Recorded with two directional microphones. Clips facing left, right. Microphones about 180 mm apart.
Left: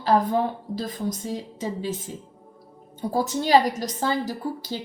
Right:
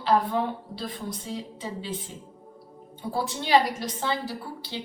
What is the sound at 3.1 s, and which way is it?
A woman's voice, 45° left (ahead or behind).